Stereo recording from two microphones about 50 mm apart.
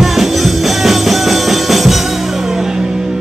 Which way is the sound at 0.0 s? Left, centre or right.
Centre.